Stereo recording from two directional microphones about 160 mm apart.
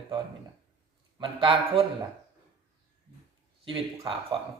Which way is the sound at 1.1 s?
30° right (ahead or behind).